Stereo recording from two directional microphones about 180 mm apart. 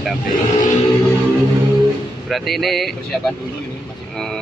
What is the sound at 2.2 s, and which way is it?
Speech, centre (ahead or behind).